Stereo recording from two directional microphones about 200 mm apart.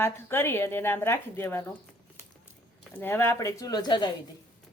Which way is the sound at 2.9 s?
10° left (ahead or behind).